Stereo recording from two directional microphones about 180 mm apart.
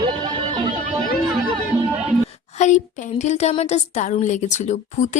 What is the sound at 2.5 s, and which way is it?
A woman's voice, 40° left (ahead or behind).